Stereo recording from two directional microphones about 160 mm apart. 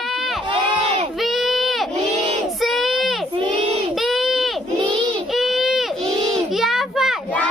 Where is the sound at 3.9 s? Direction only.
Centre (ahead or behind).